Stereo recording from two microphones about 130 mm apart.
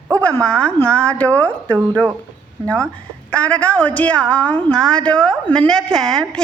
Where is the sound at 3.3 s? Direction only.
10° left (ahead or behind).